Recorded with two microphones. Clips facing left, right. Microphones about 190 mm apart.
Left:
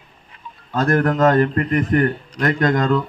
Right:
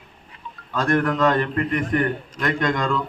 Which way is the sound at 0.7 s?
40° left (ahead or behind).